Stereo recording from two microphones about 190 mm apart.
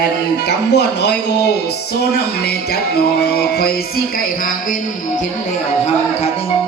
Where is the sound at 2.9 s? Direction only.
55° left (ahead or behind).